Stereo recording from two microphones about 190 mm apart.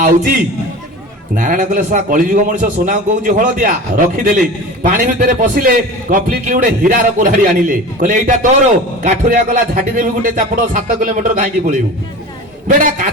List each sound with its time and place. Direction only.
1.4 s a man's voice: 45° right (ahead or behind)